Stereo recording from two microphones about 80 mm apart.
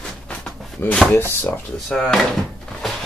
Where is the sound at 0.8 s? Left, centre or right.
Left.